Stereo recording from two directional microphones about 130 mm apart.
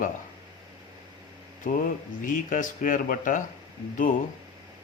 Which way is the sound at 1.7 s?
90° left.